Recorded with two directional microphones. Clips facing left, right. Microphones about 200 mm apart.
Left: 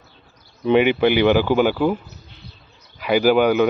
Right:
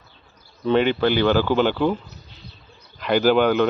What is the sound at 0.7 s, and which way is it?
Speech, 15° left (ahead or behind).